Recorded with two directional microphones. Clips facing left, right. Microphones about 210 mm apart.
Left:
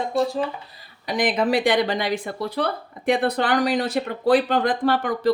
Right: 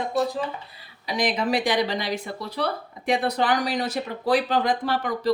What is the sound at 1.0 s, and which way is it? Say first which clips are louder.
Speech: left 3 dB; 55° left (ahead or behind).